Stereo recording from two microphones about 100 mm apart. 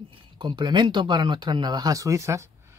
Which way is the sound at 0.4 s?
50° right (ahead or behind).